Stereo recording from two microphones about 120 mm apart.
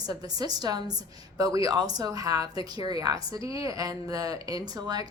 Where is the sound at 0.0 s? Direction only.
35° right (ahead or behind).